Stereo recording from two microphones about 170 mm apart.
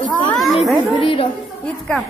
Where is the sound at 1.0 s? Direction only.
30° left (ahead or behind).